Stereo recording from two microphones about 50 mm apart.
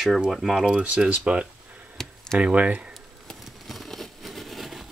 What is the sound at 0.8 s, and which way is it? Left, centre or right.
Speech, right.